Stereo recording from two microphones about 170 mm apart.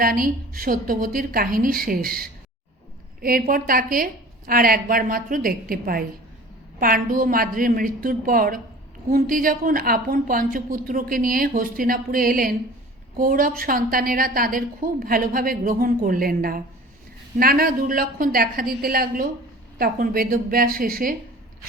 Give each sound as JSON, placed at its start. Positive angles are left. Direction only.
{"t": 0.0, "sound": "a woman's voice", "side_deg": -55}